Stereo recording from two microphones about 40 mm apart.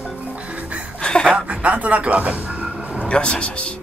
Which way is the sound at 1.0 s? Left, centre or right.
Left.